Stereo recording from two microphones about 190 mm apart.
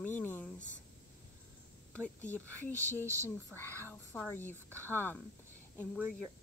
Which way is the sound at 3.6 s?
10° left (ahead or behind).